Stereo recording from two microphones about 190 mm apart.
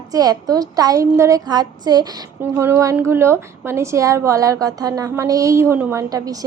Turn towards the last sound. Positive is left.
turn(degrees=-20)  # may be behind; listen again after turning